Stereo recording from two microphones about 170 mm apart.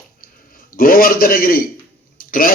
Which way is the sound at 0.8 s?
60° left (ahead or behind).